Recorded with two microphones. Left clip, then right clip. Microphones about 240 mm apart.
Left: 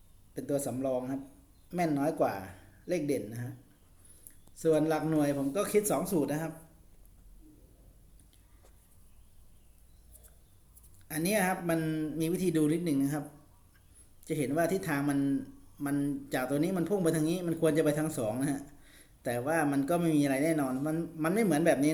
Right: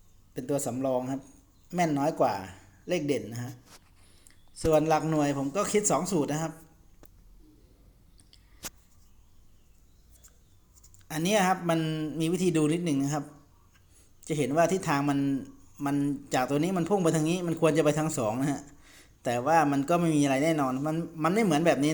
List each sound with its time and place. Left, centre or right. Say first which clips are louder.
0.3 s a man's voice: right 2 dB; right
4.7 s a man's voice: right 4 dB; right
11.1 s a man's voice: right 5 dB; right